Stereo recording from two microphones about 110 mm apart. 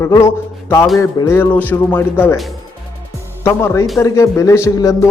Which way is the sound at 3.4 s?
25° left (ahead or behind).